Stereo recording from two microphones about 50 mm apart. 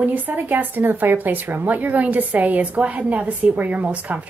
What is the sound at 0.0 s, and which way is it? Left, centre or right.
A woman's voice, right.